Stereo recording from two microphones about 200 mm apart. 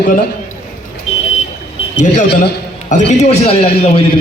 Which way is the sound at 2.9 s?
35° left (ahead or behind).